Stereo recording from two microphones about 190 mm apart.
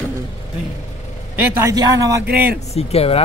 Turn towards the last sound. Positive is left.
turn(degrees=30)  # may be behind; listen again after turning